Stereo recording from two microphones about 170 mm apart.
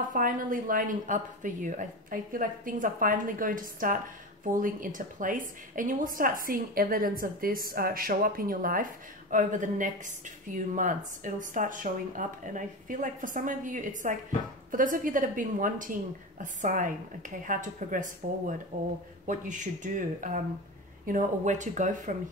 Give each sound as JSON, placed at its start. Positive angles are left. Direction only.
{"t": 0.1, "sound": "a woman's voice", "side_deg": -55}